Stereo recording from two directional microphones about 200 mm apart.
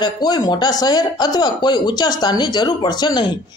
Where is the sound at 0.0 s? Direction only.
20° left (ahead or behind).